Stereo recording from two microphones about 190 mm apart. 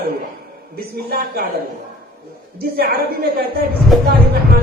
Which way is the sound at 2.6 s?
55° right (ahead or behind).